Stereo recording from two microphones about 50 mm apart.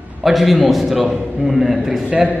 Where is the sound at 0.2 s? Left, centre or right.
Centre.